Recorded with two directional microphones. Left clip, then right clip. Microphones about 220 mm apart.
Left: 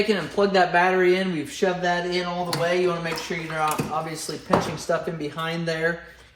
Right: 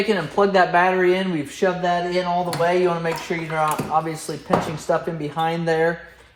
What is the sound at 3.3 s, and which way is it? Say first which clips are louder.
Speech: right 4 dB; 20° right (ahead or behind).